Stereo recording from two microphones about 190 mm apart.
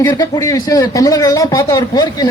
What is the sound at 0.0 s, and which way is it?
Speech, 20° left (ahead or behind).